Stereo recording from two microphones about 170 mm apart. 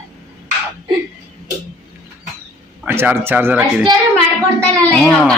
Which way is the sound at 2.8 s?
10° right (ahead or behind).